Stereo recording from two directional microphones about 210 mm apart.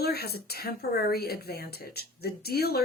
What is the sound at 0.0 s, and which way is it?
Speech, 50° left (ahead or behind).